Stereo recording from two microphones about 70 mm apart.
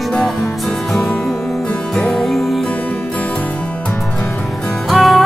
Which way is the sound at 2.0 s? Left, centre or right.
Centre.